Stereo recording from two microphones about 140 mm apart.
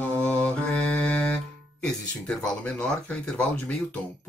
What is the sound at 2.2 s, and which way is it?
Speech, 10° left (ahead or behind).